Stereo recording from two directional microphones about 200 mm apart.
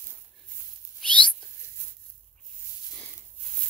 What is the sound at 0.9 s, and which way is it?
Whispering, 5° left (ahead or behind).